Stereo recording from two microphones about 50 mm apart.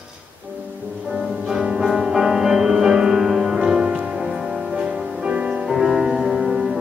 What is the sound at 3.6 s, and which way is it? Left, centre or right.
Music, centre.